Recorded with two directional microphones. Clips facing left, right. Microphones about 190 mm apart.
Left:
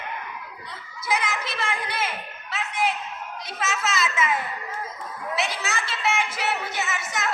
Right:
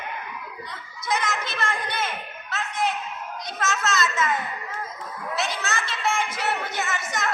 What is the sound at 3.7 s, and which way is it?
Speech, 5° left (ahead or behind).